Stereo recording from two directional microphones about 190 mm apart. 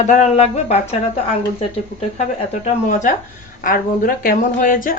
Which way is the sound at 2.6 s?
40° left (ahead or behind).